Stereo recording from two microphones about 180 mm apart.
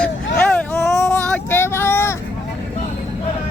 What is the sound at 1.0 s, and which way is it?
Child singing, 10° left (ahead or behind).